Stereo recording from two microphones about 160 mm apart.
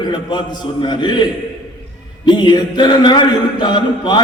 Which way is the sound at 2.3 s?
30° left (ahead or behind).